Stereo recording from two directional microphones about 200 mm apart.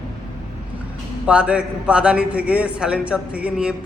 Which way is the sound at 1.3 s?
5° right (ahead or behind).